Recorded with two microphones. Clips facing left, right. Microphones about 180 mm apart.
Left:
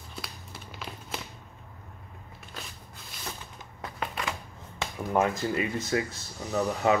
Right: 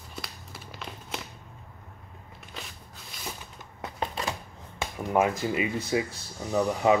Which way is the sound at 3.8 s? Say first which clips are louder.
Right 2 dB; 30° right (ahead or behind).